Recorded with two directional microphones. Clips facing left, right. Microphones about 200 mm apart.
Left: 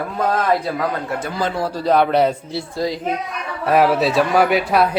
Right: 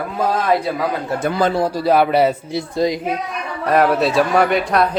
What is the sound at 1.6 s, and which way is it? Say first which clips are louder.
Speech: left 2 dB; 15° right (ahead or behind).